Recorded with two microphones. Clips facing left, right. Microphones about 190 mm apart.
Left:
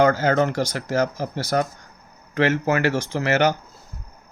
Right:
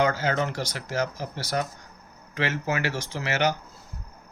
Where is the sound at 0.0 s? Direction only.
50° left (ahead or behind).